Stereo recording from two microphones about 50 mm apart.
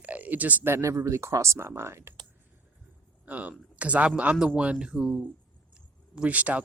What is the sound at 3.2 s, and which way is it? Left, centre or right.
Speech, right.